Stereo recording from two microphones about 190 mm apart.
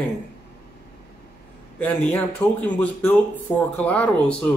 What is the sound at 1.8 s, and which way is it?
Speech, 10° left (ahead or behind).